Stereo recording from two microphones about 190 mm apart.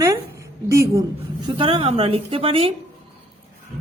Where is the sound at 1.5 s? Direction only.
30° right (ahead or behind).